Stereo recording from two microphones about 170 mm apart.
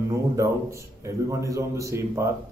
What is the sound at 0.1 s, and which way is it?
A man's voice, 15° right (ahead or behind).